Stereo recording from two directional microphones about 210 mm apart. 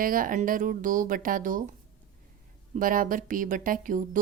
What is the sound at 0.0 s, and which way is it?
A woman's voice, 40° right (ahead or behind).